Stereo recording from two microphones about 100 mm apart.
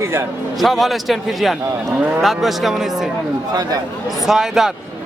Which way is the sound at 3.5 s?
40° right (ahead or behind).